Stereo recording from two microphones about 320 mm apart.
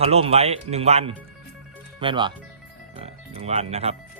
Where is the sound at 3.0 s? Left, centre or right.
Centre.